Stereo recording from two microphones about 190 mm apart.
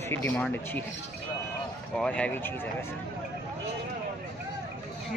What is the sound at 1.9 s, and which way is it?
Speech, 5° left (ahead or behind).